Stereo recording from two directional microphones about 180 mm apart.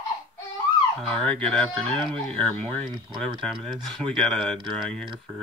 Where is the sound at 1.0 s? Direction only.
5° left (ahead or behind).